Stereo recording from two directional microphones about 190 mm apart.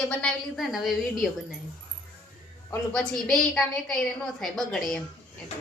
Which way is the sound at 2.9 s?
Centre (ahead or behind).